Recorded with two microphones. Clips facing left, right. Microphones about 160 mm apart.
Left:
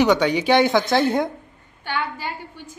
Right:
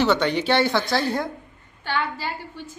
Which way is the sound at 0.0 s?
10° left (ahead or behind).